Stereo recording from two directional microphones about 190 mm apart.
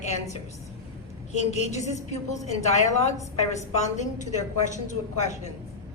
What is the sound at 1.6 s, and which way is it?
A woman's voice, 35° left (ahead or behind).